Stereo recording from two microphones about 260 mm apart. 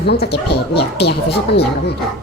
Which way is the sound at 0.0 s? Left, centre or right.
Left.